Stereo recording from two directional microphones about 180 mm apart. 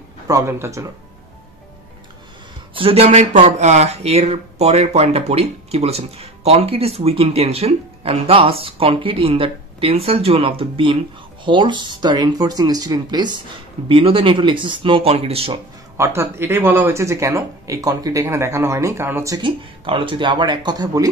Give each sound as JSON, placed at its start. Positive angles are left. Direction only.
{"t": 0.3, "sound": "speech", "side_deg": -15}
{"t": 2.7, "sound": "speech", "side_deg": -30}
{"t": 16.0, "sound": "speech", "side_deg": -15}